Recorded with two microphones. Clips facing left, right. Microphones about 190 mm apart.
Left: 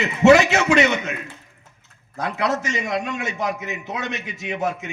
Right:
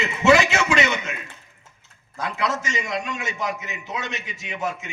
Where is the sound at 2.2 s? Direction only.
60° left (ahead or behind).